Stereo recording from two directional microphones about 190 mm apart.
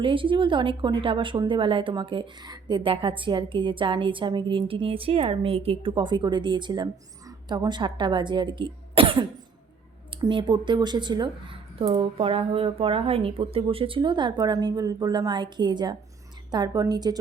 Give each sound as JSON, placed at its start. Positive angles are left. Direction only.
{"t": 0.0, "sound": "a woman's voice", "side_deg": -25}